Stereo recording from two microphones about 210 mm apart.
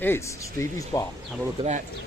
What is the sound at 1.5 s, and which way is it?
Speech, 35° right (ahead or behind).